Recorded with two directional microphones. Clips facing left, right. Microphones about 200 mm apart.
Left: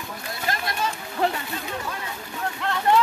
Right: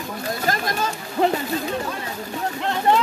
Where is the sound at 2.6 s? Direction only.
20° right (ahead or behind).